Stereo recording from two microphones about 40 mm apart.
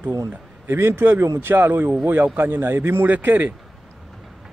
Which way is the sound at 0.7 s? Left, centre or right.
Right.